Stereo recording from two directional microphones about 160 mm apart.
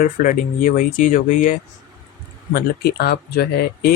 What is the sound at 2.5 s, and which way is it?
Speech, 85° left.